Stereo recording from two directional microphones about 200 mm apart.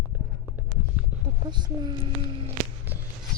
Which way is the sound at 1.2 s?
20° right (ahead or behind).